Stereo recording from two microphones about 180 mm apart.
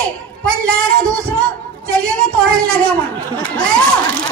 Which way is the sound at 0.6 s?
5° left (ahead or behind).